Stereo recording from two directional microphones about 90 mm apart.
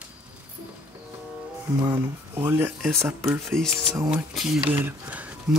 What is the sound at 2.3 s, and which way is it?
Speech, 25° right (ahead or behind).